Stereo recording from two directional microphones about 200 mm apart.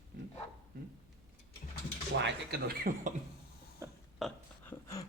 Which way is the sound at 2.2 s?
50° right (ahead or behind).